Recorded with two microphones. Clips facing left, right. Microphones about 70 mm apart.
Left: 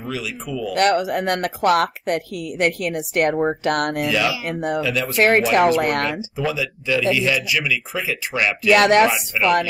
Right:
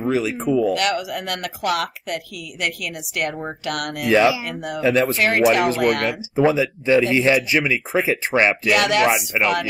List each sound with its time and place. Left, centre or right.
0.0 s speech: right
0.7 s a woman's voice: left
4.1 s speech: right
4.5 s a woman's voice: left
4.8 s speech: right
5.1 s a woman's voice: left
6.0 s speech: right
8.7 s a woman's voice: left
9.0 s speech: right